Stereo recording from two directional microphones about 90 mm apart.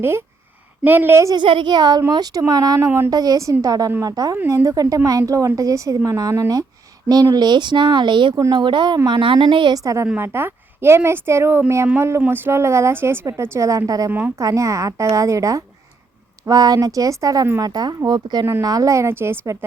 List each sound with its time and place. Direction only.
0.0 s a woman's voice: 25° right (ahead or behind)
1.4 s a woman's voice: 65° right (ahead or behind); by 3.1 s 30° right (ahead or behind)
3.1 s a woman's voice: 45° right (ahead or behind)
7.3 s speech: 55° right (ahead or behind)
9.0 s a woman's voice: 70° right (ahead or behind)
9.7 s a woman's voice: 35° right (ahead or behind)
10.2 s a woman's voice: 25° right (ahead or behind); by 14.1 s 40° right (ahead or behind)
14.1 s a woman's voice: 25° right (ahead or behind)
14.3 s a woman's voice: 35° right (ahead or behind)